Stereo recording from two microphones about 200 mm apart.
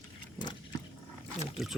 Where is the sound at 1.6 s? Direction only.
Centre (ahead or behind).